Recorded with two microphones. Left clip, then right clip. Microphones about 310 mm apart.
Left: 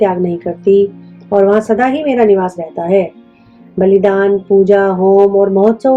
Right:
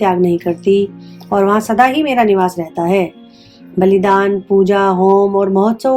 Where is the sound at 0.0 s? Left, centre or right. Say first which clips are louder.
Even; right.